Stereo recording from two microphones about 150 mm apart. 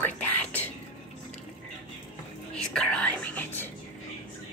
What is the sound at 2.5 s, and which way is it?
Whispering, 5° left (ahead or behind).